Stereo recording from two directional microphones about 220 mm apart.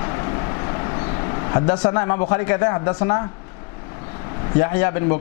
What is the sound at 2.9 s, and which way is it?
A man's voice, 15° left (ahead or behind).